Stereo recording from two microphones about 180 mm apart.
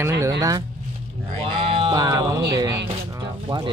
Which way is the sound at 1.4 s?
30° right (ahead or behind).